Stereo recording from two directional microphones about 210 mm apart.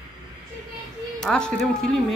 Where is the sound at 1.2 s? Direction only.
5° left (ahead or behind).